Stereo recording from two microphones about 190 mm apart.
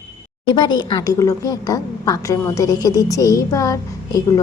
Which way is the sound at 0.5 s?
20° left (ahead or behind).